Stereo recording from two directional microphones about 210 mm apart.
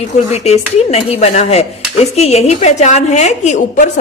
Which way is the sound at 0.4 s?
30° left (ahead or behind).